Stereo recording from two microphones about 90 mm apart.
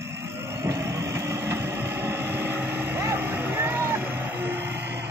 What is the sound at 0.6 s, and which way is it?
Vehicle, 35° right (ahead or behind).